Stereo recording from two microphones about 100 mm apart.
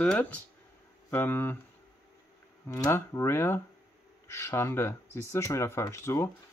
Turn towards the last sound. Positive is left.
turn(degrees=30)  # may be behind; listen again after turning